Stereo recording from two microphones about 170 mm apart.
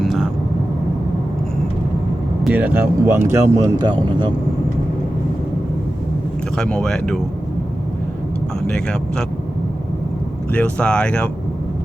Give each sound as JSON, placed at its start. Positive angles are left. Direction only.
{"t": 0.0, "sound": "vehicle", "side_deg": 0}
{"t": 2.4, "sound": "speech", "side_deg": -10}
{"t": 6.6, "sound": "speech", "side_deg": 5}
{"t": 8.6, "sound": "speech", "side_deg": 5}
{"t": 10.5, "sound": "speech", "side_deg": 5}